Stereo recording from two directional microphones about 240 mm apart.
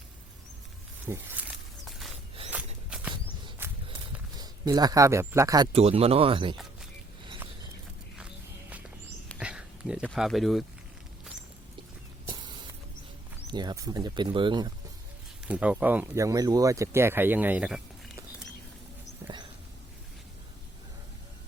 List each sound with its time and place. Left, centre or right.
1.0 s a sound: centre
2.5 s walk: centre
4.4 s speech: centre
5.7 s speech: right
9.4 s speech: centre
12.2 s spray: centre
13.5 s speech: centre
15.4 s speech: centre
19.2 s dog: centre